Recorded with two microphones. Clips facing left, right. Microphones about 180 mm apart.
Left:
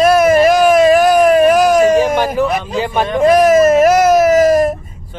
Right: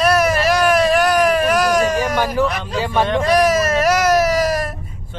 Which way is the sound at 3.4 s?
50° left (ahead or behind).